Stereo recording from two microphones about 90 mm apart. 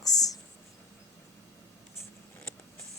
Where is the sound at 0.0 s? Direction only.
45° left (ahead or behind).